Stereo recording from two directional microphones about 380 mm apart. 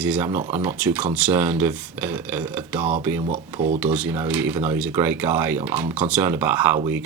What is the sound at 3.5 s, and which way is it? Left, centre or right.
Speech, centre.